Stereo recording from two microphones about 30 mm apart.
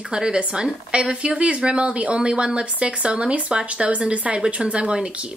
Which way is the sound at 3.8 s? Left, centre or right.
Right.